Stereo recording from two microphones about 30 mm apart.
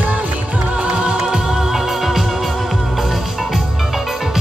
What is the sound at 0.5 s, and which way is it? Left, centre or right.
Music, right.